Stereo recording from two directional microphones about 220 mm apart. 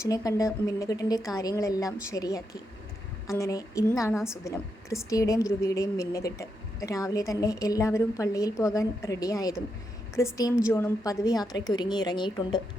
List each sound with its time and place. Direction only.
0.0 s a woman's voice: 15° left (ahead or behind)